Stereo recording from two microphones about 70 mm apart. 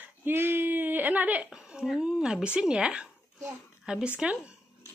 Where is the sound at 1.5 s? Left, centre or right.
Centre.